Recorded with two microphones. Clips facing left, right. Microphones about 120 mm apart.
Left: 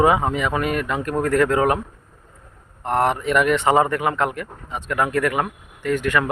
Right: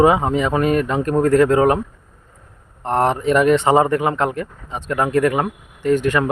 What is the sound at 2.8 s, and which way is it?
Speech, 30° right (ahead or behind).